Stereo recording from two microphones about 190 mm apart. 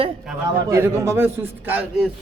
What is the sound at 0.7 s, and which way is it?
A man's voice, 15° right (ahead or behind).